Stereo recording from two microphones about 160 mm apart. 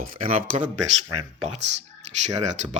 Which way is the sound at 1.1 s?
40° right (ahead or behind).